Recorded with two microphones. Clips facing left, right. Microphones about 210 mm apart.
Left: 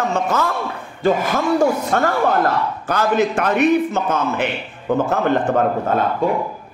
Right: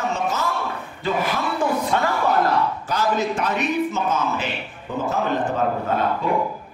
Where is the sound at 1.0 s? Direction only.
45° left (ahead or behind).